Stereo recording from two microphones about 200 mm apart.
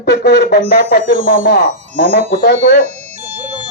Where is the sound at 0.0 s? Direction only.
55° left (ahead or behind).